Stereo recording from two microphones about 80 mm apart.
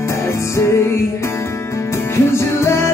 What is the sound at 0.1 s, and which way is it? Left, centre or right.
Music, left.